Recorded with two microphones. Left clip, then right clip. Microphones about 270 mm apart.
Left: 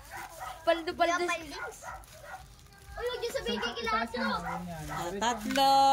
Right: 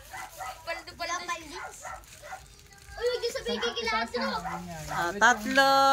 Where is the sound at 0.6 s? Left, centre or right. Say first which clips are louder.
Left 11 dB; left.